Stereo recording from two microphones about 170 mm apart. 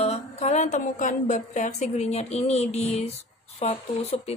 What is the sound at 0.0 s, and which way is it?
A woman's voice, 40° left (ahead or behind).